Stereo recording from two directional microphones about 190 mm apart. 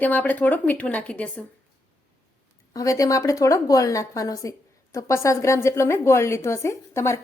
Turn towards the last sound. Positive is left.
turn(degrees=15)  # may be behind; listen again after turning